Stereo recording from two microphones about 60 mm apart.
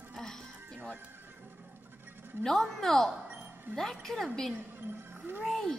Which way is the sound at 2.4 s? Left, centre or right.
Centre.